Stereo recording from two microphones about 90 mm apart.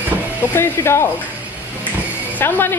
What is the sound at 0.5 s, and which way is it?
Speech, 25° left (ahead or behind).